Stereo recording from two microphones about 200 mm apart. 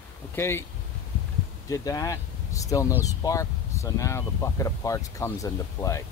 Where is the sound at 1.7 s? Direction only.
15° left (ahead or behind).